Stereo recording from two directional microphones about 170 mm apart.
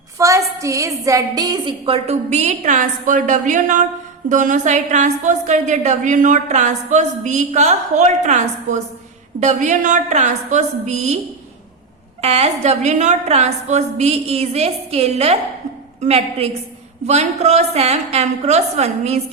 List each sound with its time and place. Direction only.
0.2 s a woman's voice: 20° right (ahead or behind); by 11.2 s 40° right (ahead or behind)
12.2 s a woman's voice: 40° right (ahead or behind)